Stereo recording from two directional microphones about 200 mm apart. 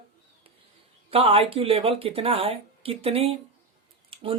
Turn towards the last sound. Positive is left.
turn(degrees=-25)  # may be behind; listen again after turning